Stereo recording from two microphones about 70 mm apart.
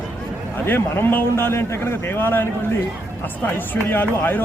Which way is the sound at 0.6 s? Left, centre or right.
Left.